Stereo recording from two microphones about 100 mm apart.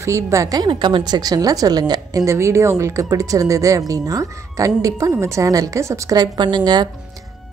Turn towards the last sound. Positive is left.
turn(degrees=-45)  # may be behind; listen again after turning